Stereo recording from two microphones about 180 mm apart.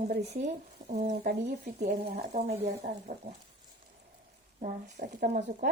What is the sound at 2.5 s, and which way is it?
Speech, 40° right (ahead or behind).